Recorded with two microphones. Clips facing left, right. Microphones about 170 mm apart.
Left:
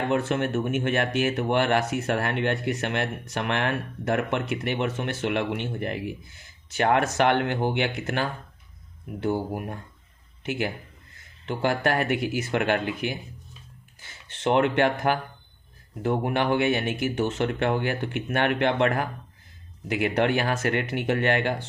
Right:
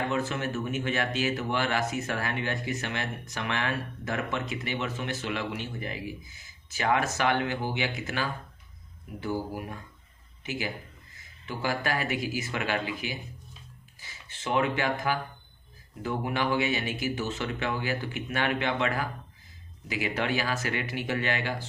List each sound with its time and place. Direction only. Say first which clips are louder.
0.1 s speech: left 6 dB; 60° left (ahead or behind)